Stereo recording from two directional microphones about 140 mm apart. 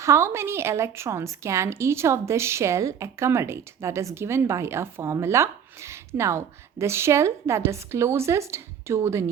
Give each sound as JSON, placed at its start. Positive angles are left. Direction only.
{"t": 0.0, "sound": "a woman's voice", "side_deg": -20}